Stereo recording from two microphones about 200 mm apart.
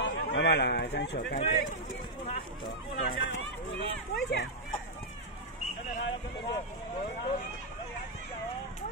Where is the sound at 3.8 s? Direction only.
55° left (ahead or behind).